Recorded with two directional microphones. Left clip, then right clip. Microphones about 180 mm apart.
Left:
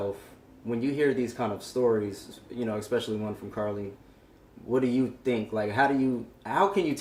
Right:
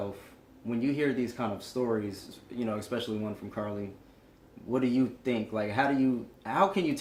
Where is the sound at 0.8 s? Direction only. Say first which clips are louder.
Left 3 dB; 20° right (ahead or behind).